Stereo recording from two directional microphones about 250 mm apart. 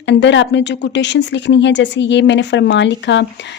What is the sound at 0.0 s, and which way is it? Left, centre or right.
A woman's voice, left.